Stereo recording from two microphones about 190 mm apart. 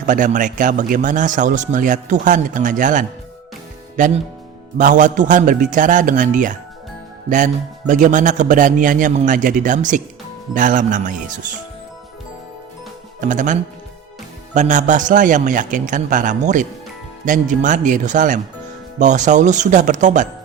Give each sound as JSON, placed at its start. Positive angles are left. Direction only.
{"t": 0.0, "sound": "speech", "side_deg": -40}
{"t": 13.2, "sound": "a man's voice", "side_deg": -40}